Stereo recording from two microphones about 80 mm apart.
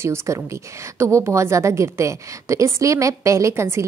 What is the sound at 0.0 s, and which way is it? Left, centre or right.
A woman's voice, right.